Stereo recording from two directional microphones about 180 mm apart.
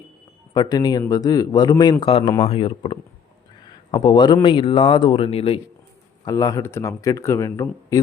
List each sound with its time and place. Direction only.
0.5 s a man's voice: 20° left (ahead or behind)
3.7 s a sound: 25° left (ahead or behind)
4.4 s a man's voice: 30° left (ahead or behind)
6.2 s a man's voice: 20° left (ahead or behind)